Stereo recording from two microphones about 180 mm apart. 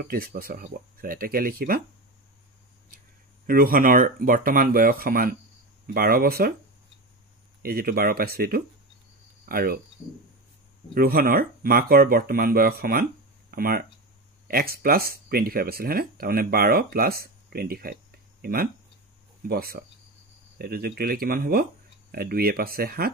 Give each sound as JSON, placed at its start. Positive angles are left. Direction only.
{"t": 0.0, "sound": "speech", "side_deg": -50}
{"t": 3.4, "sound": "speech", "side_deg": -50}
{"t": 7.6, "sound": "speech", "side_deg": -55}
{"t": 11.0, "sound": "speech", "side_deg": -55}